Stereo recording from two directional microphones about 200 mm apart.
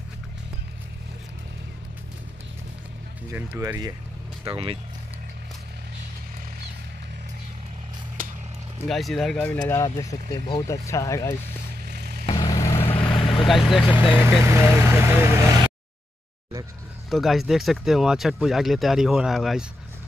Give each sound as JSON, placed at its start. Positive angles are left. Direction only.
{"t": 3.3, "sound": "speech", "side_deg": -15}
{"t": 4.5, "sound": "speech", "side_deg": -25}
{"t": 8.8, "sound": "speech", "side_deg": 0}
{"t": 9.8, "sound": "speech", "side_deg": 20}
{"t": 11.9, "sound": "vehicle", "side_deg": -55}
{"t": 12.4, "sound": "vehicle", "side_deg": 15}
{"t": 12.7, "sound": "vehicle", "side_deg": 25}
{"t": 13.5, "sound": "speech", "side_deg": 0}
{"t": 14.4, "sound": "speech", "side_deg": -15}
{"t": 17.1, "sound": "speech", "side_deg": 0}